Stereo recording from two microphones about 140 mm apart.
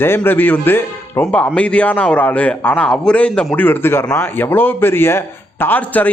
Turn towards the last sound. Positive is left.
turn(degrees=10)  # may be behind; listen again after turning